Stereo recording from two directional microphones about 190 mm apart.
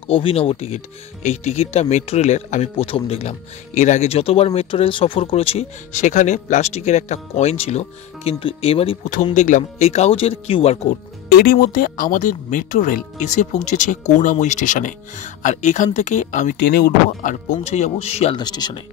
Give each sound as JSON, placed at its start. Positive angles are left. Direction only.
{"t": 0.1, "sound": "speech", "side_deg": 30}
{"t": 11.3, "sound": "speech", "side_deg": 50}
{"t": 16.5, "sound": "speech", "side_deg": 55}